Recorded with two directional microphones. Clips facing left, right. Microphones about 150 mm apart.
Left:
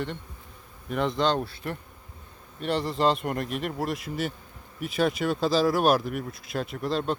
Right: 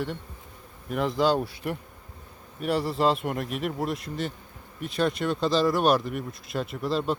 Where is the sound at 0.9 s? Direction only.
Centre (ahead or behind).